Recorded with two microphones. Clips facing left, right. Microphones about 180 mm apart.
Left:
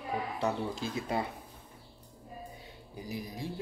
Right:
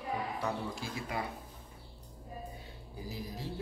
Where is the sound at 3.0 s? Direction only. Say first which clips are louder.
Left 3 dB; 15° left (ahead or behind).